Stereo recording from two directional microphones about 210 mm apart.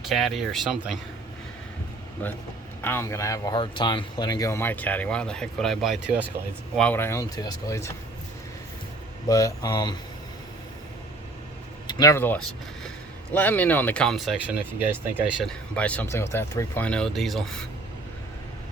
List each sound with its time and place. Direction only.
0.1 s speech: centre (ahead or behind)
2.2 s speech: 10° left (ahead or behind)
6.7 s speech: 5° left (ahead or behind)
9.3 s speech: 15° left (ahead or behind)
11.9 s speech: 15° left (ahead or behind); by 15.5 s 5° right (ahead or behind)
15.7 s speech: 5° left (ahead or behind)